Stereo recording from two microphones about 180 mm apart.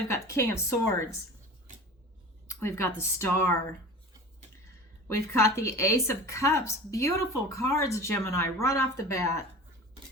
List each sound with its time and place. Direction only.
0.1 s a woman's voice: 15° left (ahead or behind)
2.5 s a woman's voice: 15° left (ahead or behind)
5.0 s a woman's voice: 15° left (ahead or behind)